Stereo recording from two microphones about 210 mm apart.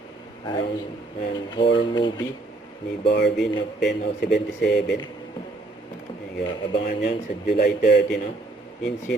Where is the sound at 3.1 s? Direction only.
50° left (ahead or behind).